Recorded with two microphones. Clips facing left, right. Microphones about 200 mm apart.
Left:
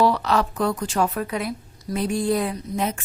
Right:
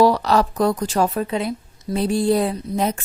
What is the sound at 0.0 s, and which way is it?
A woman's voice, 40° right (ahead or behind).